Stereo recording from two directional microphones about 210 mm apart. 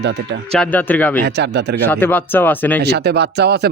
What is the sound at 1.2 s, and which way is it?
Speech, 55° right (ahead or behind).